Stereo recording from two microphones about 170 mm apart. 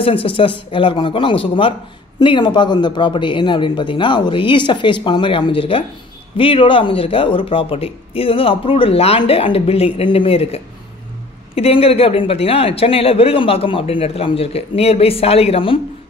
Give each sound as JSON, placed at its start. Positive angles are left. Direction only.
{"t": 0.0, "sound": "a man's voice", "side_deg": 35}